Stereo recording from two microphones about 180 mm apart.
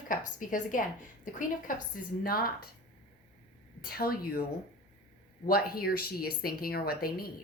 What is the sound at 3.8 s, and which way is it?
Speech, 55° left (ahead or behind).